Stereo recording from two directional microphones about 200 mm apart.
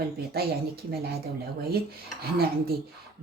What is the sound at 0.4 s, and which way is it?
Speech, 50° right (ahead or behind).